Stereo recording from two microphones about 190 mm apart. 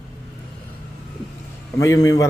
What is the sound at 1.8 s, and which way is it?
Speech, 15° left (ahead or behind).